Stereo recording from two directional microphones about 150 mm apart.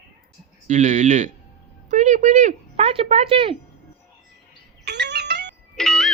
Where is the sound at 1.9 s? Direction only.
55° right (ahead or behind).